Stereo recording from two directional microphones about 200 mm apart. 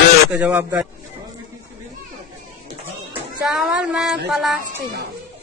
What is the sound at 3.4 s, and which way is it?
Speech, 5° right (ahead or behind).